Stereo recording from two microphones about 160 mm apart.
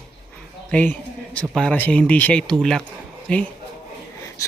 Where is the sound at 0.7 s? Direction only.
10° left (ahead or behind).